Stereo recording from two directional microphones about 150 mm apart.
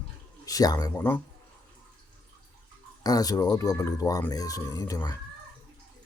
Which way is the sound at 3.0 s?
25° left (ahead or behind).